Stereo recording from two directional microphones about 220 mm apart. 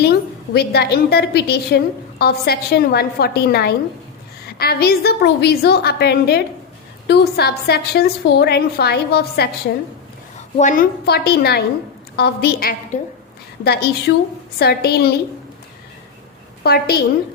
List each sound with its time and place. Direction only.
0.0 s a woman's voice: 45° left (ahead or behind)
10.3 s a woman's voice: 35° left (ahead or behind)
14.1 s a woman's voice: 50° left (ahead or behind)
16.6 s a woman's voice: 45° left (ahead or behind)